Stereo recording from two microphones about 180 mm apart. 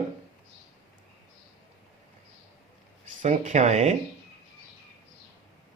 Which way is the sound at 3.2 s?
40° right (ahead or behind).